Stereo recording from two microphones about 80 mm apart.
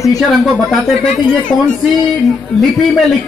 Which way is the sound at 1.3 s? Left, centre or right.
Centre.